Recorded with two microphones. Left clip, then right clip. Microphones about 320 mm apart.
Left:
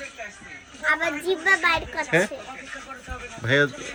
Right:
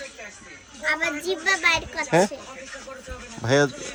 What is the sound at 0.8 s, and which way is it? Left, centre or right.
A woman's voice, centre.